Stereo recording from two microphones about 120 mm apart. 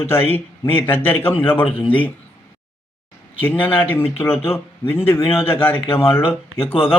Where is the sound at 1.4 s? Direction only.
45° left (ahead or behind).